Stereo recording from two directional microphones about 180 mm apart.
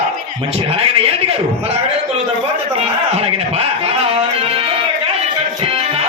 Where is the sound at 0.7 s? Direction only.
35° right (ahead or behind).